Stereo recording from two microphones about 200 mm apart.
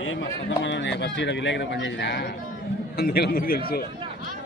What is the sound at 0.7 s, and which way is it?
A man's voice, 60° left (ahead or behind).